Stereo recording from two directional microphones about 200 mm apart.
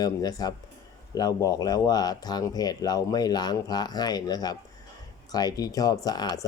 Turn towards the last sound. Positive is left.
turn(degrees=20)  # may be behind; listen again after turning